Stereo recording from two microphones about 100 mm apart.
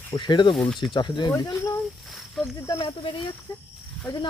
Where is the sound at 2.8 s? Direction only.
60° left (ahead or behind).